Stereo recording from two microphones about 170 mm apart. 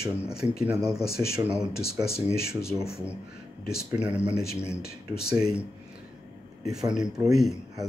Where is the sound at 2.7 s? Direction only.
20° right (ahead or behind).